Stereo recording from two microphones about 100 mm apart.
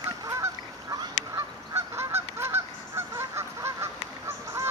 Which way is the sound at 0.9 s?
30° right (ahead or behind).